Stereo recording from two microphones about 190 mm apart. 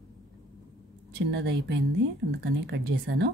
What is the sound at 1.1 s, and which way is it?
Speech, 65° right (ahead or behind).